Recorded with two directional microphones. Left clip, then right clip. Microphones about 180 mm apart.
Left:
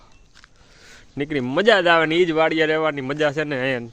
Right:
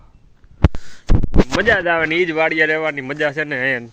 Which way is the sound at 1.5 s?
20° left (ahead or behind).